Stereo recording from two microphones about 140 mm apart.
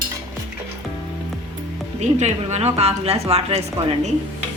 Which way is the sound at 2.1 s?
55° right (ahead or behind).